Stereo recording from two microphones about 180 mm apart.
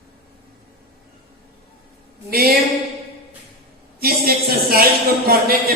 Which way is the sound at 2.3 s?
60° right (ahead or behind).